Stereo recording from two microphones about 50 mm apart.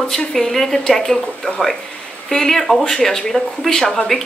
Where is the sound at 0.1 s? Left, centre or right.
Centre.